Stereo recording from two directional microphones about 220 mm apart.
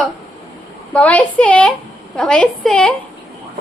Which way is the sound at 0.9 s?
5° left (ahead or behind).